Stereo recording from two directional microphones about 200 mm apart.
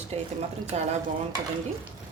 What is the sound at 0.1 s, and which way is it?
Speech, 30° right (ahead or behind).